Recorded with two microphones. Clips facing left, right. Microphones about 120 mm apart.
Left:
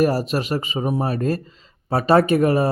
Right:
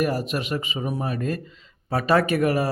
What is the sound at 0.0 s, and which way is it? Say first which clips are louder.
Speech: left 5 dB; 35° left (ahead or behind).